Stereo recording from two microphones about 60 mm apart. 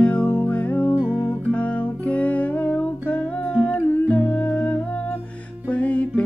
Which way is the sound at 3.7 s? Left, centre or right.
Left.